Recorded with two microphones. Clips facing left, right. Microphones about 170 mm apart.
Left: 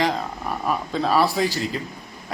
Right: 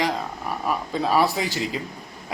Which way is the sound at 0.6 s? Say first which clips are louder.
Left 1 dB; 10° right (ahead or behind).